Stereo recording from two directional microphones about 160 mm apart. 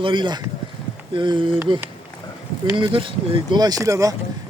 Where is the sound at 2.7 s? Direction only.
30° right (ahead or behind).